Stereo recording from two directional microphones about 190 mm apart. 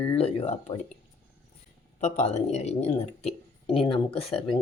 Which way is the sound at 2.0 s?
35° left (ahead or behind).